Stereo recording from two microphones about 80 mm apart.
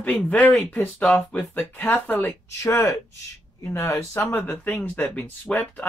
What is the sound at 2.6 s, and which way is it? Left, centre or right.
Speech, left.